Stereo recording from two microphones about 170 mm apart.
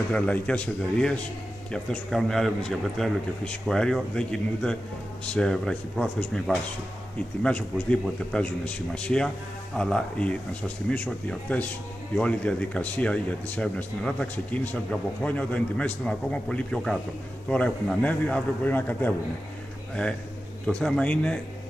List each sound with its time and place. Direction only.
0.1 s a man's voice: 5° left (ahead or behind)
20.6 s speech: 5° left (ahead or behind)